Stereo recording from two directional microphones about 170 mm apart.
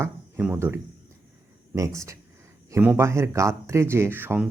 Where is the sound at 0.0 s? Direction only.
10° right (ahead or behind).